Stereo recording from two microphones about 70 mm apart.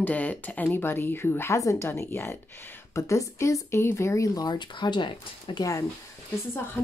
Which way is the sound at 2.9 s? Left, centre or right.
Left.